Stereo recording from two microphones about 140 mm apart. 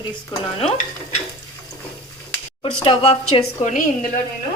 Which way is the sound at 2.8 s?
40° left (ahead or behind).